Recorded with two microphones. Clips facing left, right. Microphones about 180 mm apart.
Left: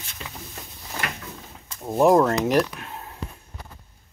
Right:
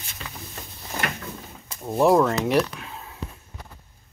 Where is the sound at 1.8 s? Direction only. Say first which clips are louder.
Left 1 dB; 5° left (ahead or behind).